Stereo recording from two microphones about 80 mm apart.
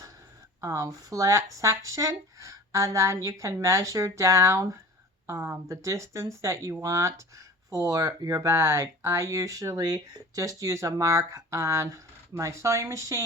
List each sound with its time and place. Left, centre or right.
0.6 s speech: right